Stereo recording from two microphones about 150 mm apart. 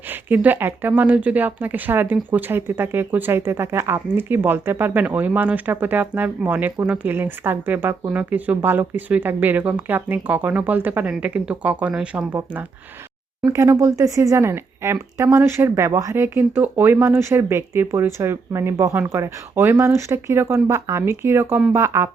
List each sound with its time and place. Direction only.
0.3 s speech: 10° right (ahead or behind)